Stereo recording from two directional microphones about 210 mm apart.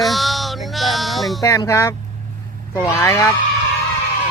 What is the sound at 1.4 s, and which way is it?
Speech, 15° left (ahead or behind).